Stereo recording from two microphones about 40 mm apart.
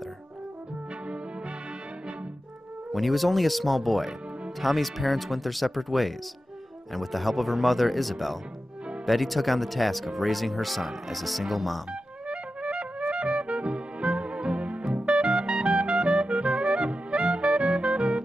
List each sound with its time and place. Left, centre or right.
2.9 s speech: centre
12.3 s music: right